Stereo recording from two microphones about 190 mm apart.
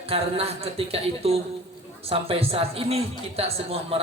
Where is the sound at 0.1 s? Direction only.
30° right (ahead or behind).